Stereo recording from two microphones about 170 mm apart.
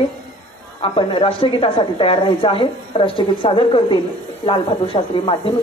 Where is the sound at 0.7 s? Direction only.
25° left (ahead or behind).